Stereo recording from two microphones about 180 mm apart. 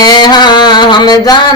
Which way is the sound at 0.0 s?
25° left (ahead or behind).